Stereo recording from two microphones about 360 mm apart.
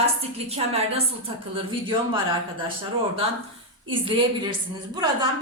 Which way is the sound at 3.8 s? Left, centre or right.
Centre.